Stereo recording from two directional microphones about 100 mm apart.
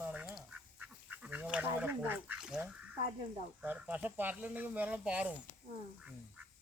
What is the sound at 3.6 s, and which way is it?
Speech, 10° right (ahead or behind).